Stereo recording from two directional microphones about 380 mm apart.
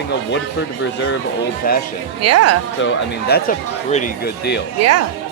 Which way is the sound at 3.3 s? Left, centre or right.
Centre.